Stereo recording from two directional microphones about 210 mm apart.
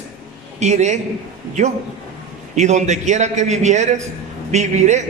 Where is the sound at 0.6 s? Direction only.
35° right (ahead or behind).